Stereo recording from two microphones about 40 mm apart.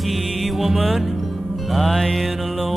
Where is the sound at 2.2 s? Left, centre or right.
Centre.